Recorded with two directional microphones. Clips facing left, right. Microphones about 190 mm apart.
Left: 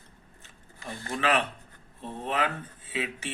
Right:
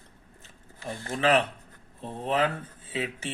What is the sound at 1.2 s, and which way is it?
A man's voice, 30° right (ahead or behind).